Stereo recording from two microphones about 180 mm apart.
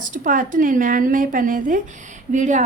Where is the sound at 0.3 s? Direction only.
45° right (ahead or behind).